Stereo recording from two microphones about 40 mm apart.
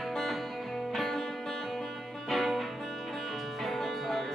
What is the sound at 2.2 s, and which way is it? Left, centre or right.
Music, centre.